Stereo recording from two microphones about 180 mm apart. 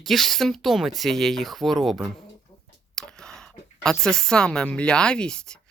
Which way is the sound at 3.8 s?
5° left (ahead or behind).